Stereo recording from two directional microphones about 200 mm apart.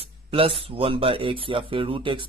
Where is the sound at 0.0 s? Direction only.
30° right (ahead or behind).